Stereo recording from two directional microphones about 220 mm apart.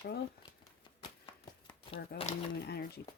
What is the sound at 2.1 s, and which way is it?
Speech, 25° left (ahead or behind).